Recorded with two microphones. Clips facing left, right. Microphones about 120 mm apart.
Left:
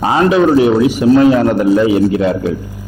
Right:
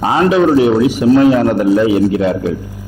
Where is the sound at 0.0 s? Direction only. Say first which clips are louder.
Even; 20° left (ahead or behind).